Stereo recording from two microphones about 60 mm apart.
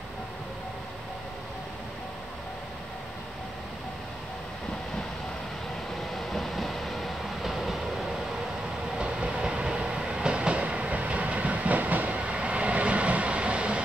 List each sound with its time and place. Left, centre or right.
6.1 s train: centre
8.9 s train: centre